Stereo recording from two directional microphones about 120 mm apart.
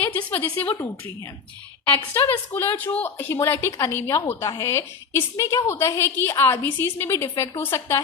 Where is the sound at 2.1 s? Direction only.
15° left (ahead or behind).